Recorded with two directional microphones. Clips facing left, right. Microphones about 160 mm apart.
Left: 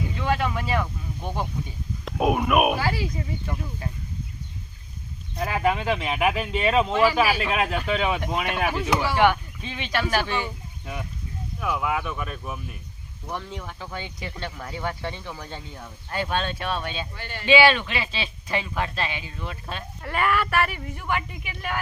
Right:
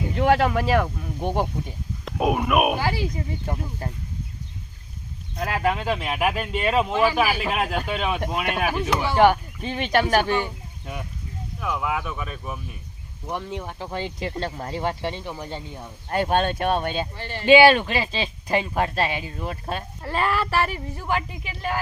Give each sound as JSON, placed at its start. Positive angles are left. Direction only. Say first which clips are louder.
{"t": 0.1, "sound": "speech", "louder": "right 9 dB", "side_deg": -60}
{"t": 2.0, "sound": "speech", "louder": "even", "side_deg": 0}
{"t": 3.4, "sound": "speech", "louder": "right 2 dB", "side_deg": -45}
{"t": 5.4, "sound": "speech", "louder": "even", "side_deg": 0}
{"t": 9.1, "sound": "speech", "louder": "right 6 dB", "side_deg": -35}
{"t": 11.6, "sound": "speech", "louder": "even", "side_deg": 0}
{"t": 13.2, "sound": "speech", "louder": "right 3 dB", "side_deg": -20}
{"t": 16.0, "sound": "speech", "louder": "right 5 dB", "side_deg": -45}
{"t": 17.2, "sound": "speech", "louder": "right 4 dB", "side_deg": -30}
{"t": 17.4, "sound": "speech", "louder": "right 5 dB", "side_deg": -45}
{"t": 20.0, "sound": "speech", "louder": "left 1 dB", "side_deg": -30}